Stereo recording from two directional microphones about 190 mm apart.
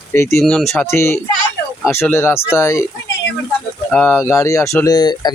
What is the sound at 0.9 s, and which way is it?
Speech, 15° left (ahead or behind).